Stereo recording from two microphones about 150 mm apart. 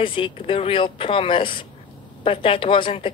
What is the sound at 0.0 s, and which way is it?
Speech, 35° left (ahead or behind).